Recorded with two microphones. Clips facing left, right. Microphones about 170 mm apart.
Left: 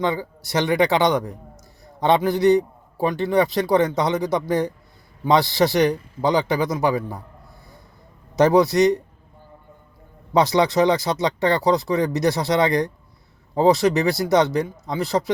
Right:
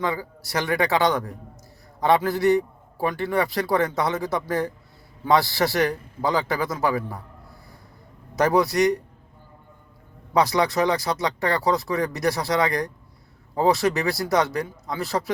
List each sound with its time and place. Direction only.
0.0 s a man's voice: 25° left (ahead or behind)
8.4 s a man's voice: 20° left (ahead or behind)
10.3 s a man's voice: 20° left (ahead or behind)